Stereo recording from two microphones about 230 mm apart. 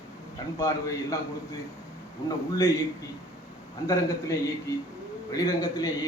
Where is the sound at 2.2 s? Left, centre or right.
Centre.